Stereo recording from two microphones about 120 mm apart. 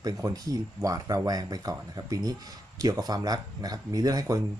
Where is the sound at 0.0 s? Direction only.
30° right (ahead or behind).